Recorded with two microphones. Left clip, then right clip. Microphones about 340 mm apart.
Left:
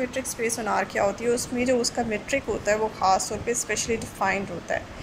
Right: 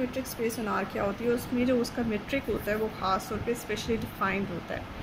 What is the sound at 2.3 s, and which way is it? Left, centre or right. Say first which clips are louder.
Speech: left 7 dB; centre.